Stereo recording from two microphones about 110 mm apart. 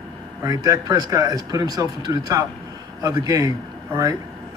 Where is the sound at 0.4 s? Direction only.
30° right (ahead or behind).